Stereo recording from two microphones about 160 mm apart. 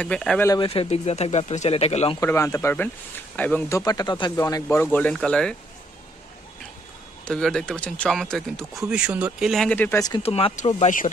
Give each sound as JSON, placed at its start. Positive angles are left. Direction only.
{"t": 0.0, "sound": "speech", "side_deg": 5}
{"t": 0.6, "sound": "speech", "side_deg": 35}
{"t": 2.1, "sound": "speech", "side_deg": 15}
{"t": 4.9, "sound": "speech", "side_deg": 10}
{"t": 7.2, "sound": "speech", "side_deg": 5}
{"t": 10.2, "sound": "speech", "side_deg": 40}